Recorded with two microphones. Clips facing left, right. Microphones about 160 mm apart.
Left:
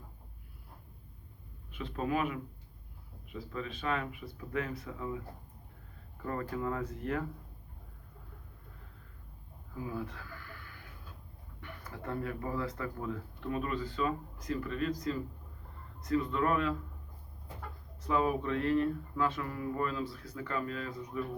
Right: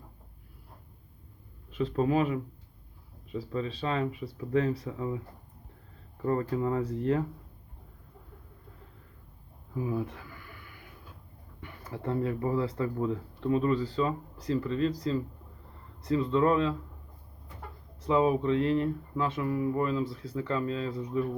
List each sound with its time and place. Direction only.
1.7 s speech: 35° right (ahead or behind)
6.2 s speech: 30° right (ahead or behind)
9.8 s a sound: 20° right (ahead or behind)
11.6 s speech: 25° right (ahead or behind)
18.0 s speech: 20° right (ahead or behind)